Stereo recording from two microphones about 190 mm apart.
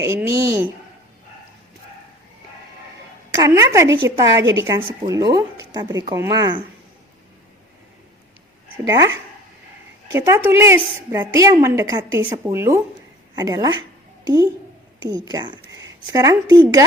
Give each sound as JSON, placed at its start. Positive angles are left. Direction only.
{"t": 0.0, "sound": "a woman's voice", "side_deg": -15}
{"t": 3.3, "sound": "a woman's voice", "side_deg": -15}
{"t": 8.9, "sound": "a woman's voice", "side_deg": -15}
{"t": 15.0, "sound": "speech", "side_deg": -20}